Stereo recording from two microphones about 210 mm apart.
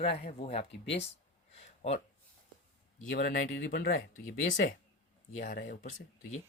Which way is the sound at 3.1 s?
40° left (ahead or behind).